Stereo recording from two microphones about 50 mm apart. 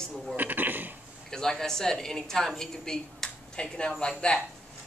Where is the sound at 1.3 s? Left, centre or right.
Centre.